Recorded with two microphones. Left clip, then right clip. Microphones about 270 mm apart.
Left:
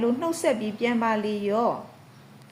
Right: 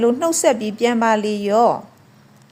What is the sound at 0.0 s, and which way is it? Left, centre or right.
A woman's voice, right.